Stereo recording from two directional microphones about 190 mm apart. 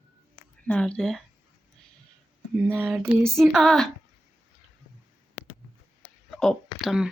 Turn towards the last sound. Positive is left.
turn(degrees=0)  # may be behind; listen again after turning